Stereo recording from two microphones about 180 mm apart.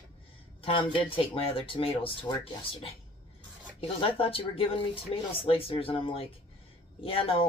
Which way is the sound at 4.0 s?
30° left (ahead or behind).